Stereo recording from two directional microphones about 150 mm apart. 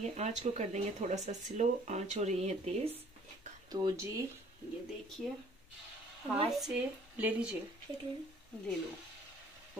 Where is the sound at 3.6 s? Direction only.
25° right (ahead or behind).